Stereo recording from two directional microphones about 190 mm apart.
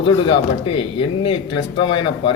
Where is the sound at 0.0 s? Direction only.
25° left (ahead or behind).